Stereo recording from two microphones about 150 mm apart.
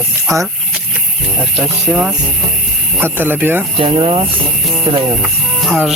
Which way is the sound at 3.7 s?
40° right (ahead or behind).